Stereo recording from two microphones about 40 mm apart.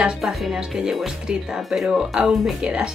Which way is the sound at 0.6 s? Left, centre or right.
Centre.